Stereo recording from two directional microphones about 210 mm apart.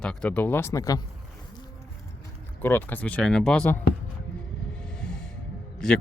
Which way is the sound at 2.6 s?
10° left (ahead or behind).